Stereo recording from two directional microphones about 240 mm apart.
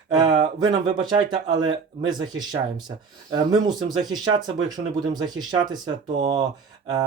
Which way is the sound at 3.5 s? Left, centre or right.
Centre.